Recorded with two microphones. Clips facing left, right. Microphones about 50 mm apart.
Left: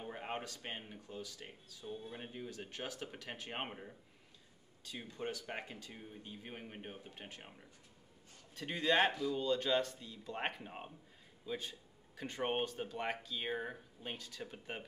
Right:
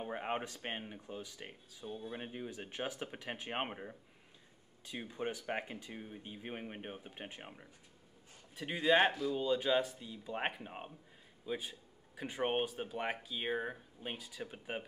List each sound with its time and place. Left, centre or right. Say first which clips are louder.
0.0 s speech: right 4 dB; right